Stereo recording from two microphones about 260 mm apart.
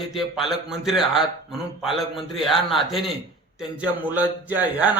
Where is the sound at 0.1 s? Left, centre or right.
Centre.